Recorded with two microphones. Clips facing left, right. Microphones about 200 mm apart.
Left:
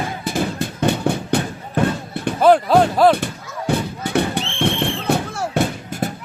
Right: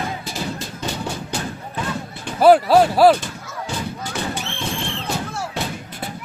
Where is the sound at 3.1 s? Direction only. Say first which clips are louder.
Left 4 dB; 60° left (ahead or behind).